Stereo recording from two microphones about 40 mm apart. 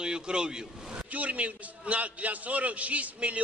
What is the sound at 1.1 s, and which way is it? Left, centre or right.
A man's voice, right.